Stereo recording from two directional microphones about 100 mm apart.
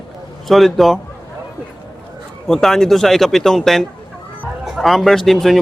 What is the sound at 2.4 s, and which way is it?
Speech, 5° left (ahead or behind).